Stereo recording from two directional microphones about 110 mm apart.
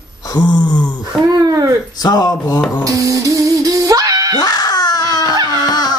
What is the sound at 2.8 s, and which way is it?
Music, 30° right (ahead or behind).